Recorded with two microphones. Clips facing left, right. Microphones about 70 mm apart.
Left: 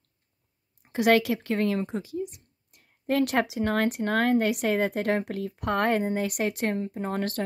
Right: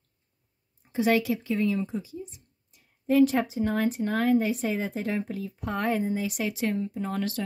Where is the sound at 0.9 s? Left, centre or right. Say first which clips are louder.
Left 2 dB; left.